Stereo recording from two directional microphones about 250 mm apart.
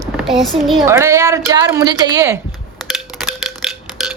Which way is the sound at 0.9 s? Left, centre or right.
Centre.